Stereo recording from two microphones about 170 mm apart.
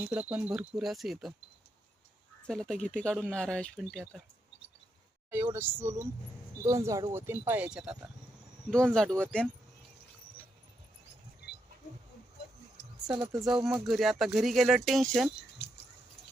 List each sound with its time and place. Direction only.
0.0 s speech: 5° right (ahead or behind)
2.5 s speech: 5° left (ahead or behind)
5.5 s speech: 15° right (ahead or behind); by 9.5 s 5° left (ahead or behind)
13.1 s speech: 5° right (ahead or behind)